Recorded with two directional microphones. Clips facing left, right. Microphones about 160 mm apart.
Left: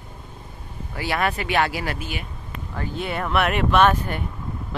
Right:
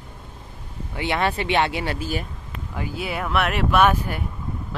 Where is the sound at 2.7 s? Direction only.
10° right (ahead or behind).